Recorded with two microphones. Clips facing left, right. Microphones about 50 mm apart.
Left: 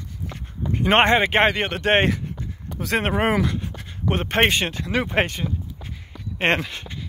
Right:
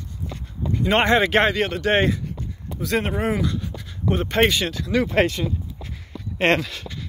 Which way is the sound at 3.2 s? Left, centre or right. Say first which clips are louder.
Left 2 dB; left.